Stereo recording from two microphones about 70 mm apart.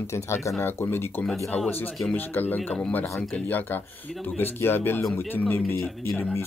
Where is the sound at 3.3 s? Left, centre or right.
Left.